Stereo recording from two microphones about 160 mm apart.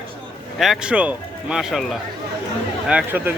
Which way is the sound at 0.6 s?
5° right (ahead or behind).